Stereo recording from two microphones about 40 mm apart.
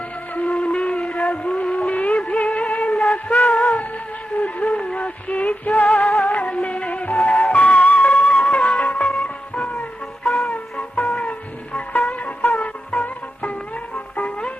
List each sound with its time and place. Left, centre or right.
0.3 s music: left
9.0 s music: left
10.3 s music: left